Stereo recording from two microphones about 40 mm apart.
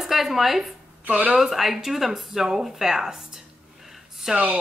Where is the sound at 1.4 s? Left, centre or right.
Centre.